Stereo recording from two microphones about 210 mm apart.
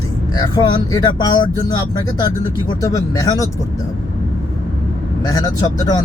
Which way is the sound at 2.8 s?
15° left (ahead or behind).